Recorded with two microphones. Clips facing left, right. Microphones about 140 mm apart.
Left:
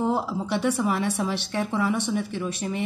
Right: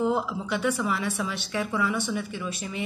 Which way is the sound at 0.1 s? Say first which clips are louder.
Left 2 dB; 35° left (ahead or behind).